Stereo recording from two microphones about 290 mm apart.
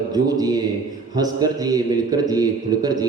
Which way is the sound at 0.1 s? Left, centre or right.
Centre.